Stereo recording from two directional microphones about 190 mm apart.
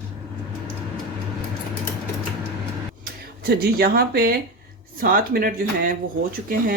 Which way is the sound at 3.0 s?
55° right (ahead or behind).